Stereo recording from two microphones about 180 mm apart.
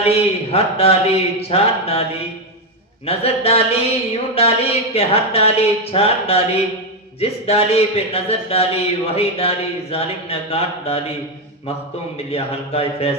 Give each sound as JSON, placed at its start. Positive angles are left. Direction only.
{"t": 0.0, "sound": "speech", "side_deg": 35}
{"t": 3.1, "sound": "speech", "side_deg": 35}
{"t": 12.3, "sound": "speech", "side_deg": 35}